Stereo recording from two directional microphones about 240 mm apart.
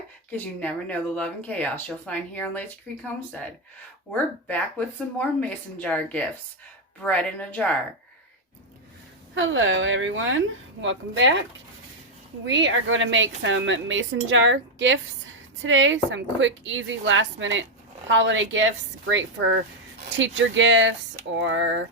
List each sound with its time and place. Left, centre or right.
0.3 s speech: centre
4.1 s speech: centre
9.3 s a woman's voice: right
12.5 s a woman's voice: right
20.1 s a woman's voice: right